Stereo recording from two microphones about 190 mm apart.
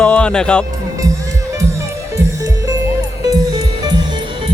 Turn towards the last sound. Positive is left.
turn(degrees=-20)  # may be behind; listen again after turning